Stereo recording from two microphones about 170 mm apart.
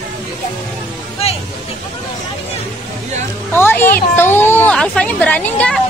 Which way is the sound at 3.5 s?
10° left (ahead or behind).